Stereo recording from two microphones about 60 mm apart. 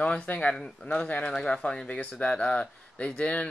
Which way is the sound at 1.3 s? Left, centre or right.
Centre.